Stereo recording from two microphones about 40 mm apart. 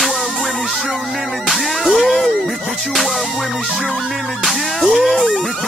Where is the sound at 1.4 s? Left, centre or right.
Centre.